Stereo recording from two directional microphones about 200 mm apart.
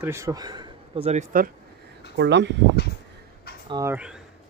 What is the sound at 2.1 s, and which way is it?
Speech, 60° right (ahead or behind).